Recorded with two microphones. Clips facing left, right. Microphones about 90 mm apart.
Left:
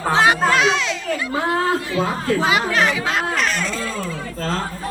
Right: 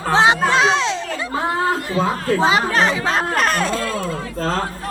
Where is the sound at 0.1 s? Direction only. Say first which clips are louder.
Right 2 dB; 25° right (ahead or behind).